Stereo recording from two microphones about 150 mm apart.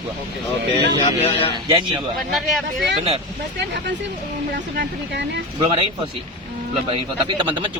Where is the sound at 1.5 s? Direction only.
30° right (ahead or behind).